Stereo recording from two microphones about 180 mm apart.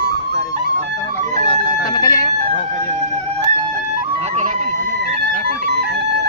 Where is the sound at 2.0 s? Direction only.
20° left (ahead or behind).